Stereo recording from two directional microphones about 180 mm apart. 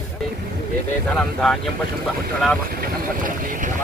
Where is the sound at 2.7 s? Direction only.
50° right (ahead or behind).